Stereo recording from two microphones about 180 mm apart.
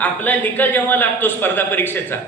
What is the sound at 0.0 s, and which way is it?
A man's voice, 10° left (ahead or behind).